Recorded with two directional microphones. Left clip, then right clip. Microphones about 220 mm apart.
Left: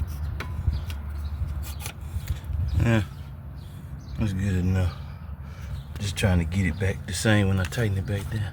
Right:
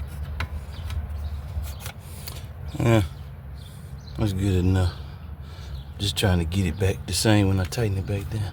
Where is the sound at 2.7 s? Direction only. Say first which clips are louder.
Right 4 dB; 20° right (ahead or behind).